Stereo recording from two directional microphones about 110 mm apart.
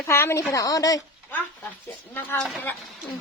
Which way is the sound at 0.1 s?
25° left (ahead or behind).